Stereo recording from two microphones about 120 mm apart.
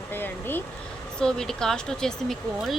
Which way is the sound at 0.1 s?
15° left (ahead or behind).